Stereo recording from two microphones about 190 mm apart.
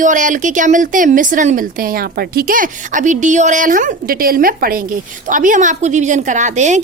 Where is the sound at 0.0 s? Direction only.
40° right (ahead or behind).